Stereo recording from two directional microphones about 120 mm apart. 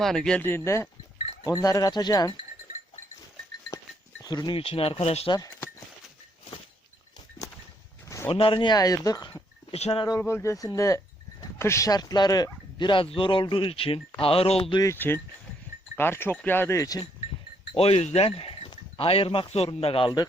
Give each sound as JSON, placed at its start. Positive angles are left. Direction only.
{"t": 0.0, "sound": "speech", "side_deg": 5}
{"t": 0.4, "sound": "speech", "side_deg": 20}
{"t": 4.2, "sound": "speech", "side_deg": 35}
{"t": 4.5, "sound": "a man's voice", "side_deg": 50}
{"t": 8.3, "sound": "speech", "side_deg": 50}
{"t": 9.7, "sound": "speech", "side_deg": 60}
{"t": 10.2, "sound": "a man's voice", "side_deg": 20}
{"t": 14.8, "sound": "speech", "side_deg": 20}
{"t": 17.7, "sound": "a man's voice", "side_deg": 60}